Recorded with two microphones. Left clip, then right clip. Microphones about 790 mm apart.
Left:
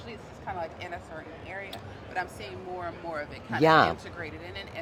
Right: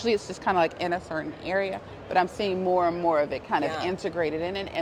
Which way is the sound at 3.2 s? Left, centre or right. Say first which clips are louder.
Right 3 dB; right.